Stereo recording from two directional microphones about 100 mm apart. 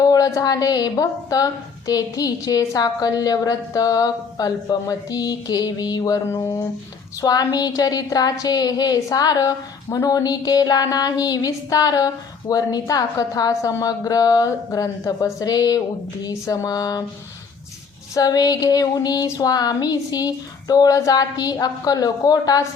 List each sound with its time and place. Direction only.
0.0 s a sound: 40° left (ahead or behind)
0.3 s speech: 35° left (ahead or behind)
18.1 s speech: 40° left (ahead or behind)